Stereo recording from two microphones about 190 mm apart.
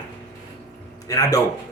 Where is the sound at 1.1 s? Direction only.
20° left (ahead or behind).